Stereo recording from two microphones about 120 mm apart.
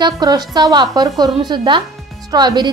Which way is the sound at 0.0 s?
35° right (ahead or behind).